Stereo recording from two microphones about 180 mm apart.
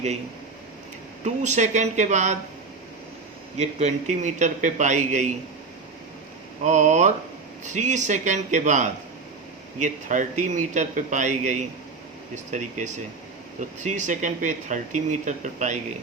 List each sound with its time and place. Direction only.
1.2 s a man's voice: 40° right (ahead or behind)
3.6 s a man's voice: 40° right (ahead or behind)
6.7 s a man's voice: 40° right (ahead or behind)